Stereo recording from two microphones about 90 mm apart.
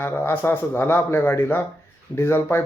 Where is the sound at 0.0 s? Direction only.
25° left (ahead or behind).